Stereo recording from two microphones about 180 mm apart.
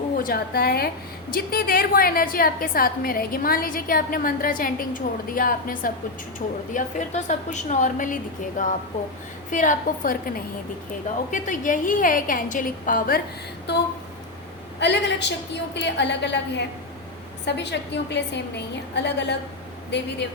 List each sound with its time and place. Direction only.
0.2 s a woman's voice: 55° left (ahead or behind)
6.7 s a woman's voice: 40° left (ahead or behind)
14.8 s a woman's voice: 75° left (ahead or behind)